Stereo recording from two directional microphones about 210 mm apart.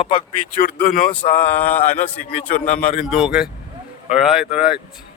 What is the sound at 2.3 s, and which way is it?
Speech, 40° left (ahead or behind).